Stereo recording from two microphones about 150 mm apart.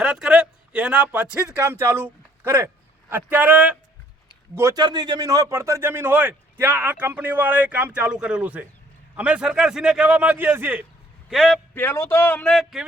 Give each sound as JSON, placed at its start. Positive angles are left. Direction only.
{"t": 0.0, "sound": "a man's voice", "side_deg": -5}
{"t": 4.8, "sound": "a man's voice", "side_deg": -30}
{"t": 11.3, "sound": "a man's voice", "side_deg": 0}
{"t": 11.7, "sound": "a man's voice", "side_deg": 15}